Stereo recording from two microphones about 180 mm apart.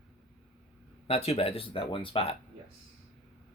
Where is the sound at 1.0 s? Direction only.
35° left (ahead or behind).